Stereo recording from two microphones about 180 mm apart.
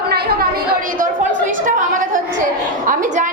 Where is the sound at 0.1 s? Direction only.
60° right (ahead or behind).